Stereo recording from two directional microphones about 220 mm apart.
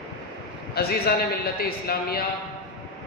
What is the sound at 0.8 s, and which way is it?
A man's voice, 45° left (ahead or behind).